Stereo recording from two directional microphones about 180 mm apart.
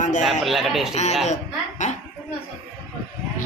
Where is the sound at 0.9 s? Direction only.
40° left (ahead or behind).